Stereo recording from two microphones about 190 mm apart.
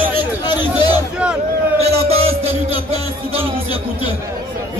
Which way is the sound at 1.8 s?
30° right (ahead or behind).